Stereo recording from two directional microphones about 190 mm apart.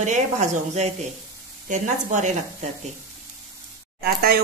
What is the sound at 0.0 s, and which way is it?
Speech, 40° right (ahead or behind).